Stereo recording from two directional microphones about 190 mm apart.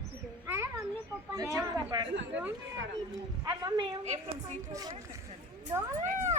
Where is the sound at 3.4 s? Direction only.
20° right (ahead or behind).